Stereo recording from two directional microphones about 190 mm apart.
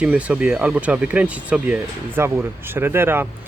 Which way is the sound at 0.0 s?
5° right (ahead or behind).